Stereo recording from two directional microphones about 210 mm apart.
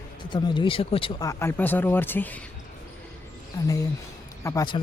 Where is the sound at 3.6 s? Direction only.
20° left (ahead or behind).